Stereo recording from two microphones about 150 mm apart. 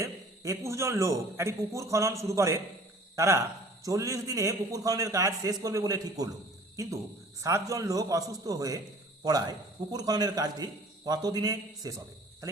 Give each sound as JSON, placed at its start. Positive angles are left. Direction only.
{"t": 0.0, "sound": "a man's voice", "side_deg": -20}